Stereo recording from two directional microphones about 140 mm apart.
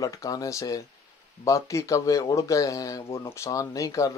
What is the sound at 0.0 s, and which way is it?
Speech, 25° left (ahead or behind).